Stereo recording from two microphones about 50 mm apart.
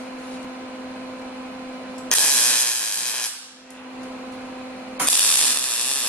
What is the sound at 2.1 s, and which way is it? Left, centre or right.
Ratchet, left.